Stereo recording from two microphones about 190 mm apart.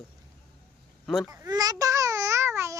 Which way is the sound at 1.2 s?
20° right (ahead or behind).